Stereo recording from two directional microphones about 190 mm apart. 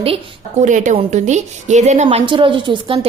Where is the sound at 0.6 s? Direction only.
40° right (ahead or behind).